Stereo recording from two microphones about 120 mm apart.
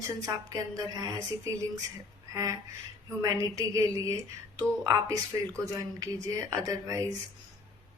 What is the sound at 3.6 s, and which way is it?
Speech, 25° right (ahead or behind).